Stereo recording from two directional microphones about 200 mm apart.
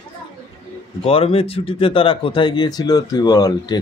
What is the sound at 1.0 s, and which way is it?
Speech, 30° left (ahead or behind).